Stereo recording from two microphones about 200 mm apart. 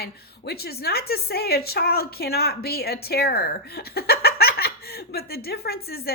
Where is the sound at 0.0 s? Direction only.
50° left (ahead or behind).